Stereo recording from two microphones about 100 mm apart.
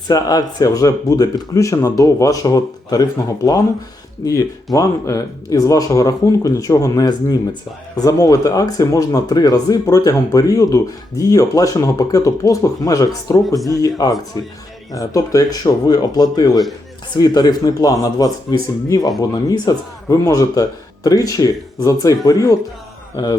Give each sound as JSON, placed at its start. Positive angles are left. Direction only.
{"t": 0.1, "sound": "speech", "side_deg": 40}